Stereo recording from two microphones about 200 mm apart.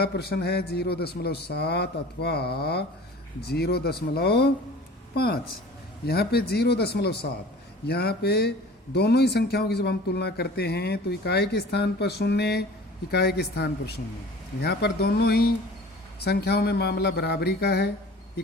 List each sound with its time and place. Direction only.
0.0 s speech: 50° left (ahead or behind)